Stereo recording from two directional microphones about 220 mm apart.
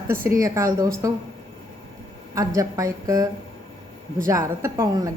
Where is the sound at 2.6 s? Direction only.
15° right (ahead or behind).